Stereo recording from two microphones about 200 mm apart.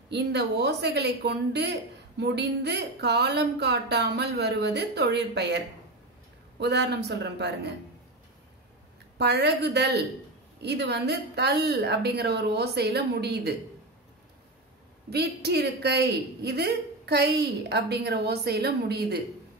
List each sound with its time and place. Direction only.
0.1 s a woman's voice: 55° right (ahead or behind)
6.6 s a woman's voice: 55° right (ahead or behind)
9.2 s a woman's voice: 55° right (ahead or behind)
15.0 s a woman's voice: 55° right (ahead or behind)